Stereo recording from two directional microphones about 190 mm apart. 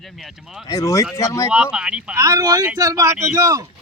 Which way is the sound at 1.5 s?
5° right (ahead or behind).